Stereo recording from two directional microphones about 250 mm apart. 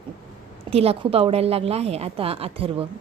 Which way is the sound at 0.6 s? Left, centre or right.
Right.